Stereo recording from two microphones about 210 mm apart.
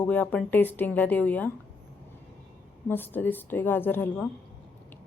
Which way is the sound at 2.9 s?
10° left (ahead or behind).